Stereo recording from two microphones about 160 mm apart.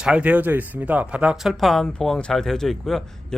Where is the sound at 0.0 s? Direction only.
5° right (ahead or behind).